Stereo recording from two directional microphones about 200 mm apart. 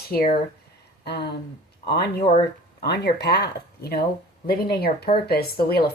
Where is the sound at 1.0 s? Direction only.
55° left (ahead or behind).